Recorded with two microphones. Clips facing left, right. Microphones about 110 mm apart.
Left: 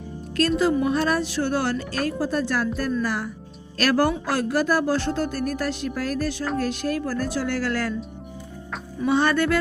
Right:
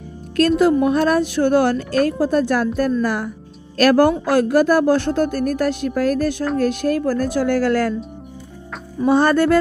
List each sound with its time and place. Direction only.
0.6 s speech: 55° right (ahead or behind)
9.0 s music: 40° right (ahead or behind)